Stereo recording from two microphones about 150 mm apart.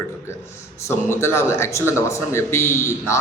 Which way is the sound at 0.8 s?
15° left (ahead or behind).